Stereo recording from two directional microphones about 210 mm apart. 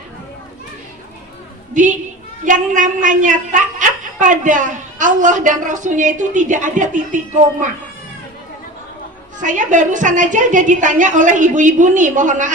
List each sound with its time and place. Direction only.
1.7 s a woman's voice: 35° right (ahead or behind)
9.4 s a woman's voice: 35° right (ahead or behind)